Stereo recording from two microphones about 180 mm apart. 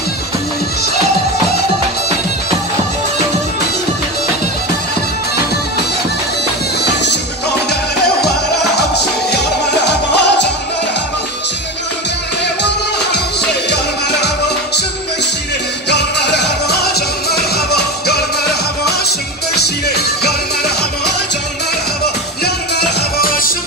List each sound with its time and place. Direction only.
6.8 s music: 70° left (ahead or behind)
8.7 s music: 65° left (ahead or behind)
15.9 s music: 65° left (ahead or behind)
19.5 s music: 65° left (ahead or behind)
22.4 s music: 60° left (ahead or behind)